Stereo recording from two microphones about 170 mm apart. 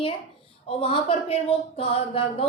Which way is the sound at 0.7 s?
35° left (ahead or behind).